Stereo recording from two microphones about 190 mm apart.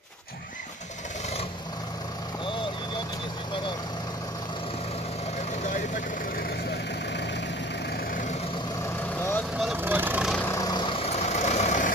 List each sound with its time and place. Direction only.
9.6 s vehicle: 5° right (ahead or behind)
10.3 s vehicle: 10° left (ahead or behind); by 11.9 s 40° left (ahead or behind)